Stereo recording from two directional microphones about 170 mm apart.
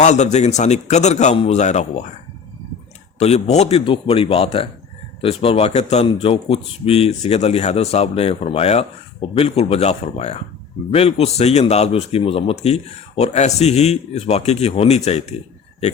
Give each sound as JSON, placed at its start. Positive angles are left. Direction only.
{"t": 0.0, "sound": "a man's voice", "side_deg": 40}
{"t": 3.2, "sound": "a man's voice", "side_deg": 40}